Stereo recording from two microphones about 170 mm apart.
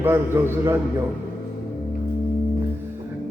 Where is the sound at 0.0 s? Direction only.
15° right (ahead or behind).